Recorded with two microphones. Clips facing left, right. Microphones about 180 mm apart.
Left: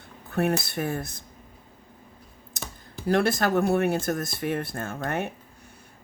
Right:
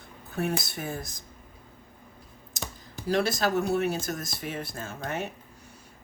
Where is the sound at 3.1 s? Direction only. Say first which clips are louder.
Left 3 dB; 60° left (ahead or behind).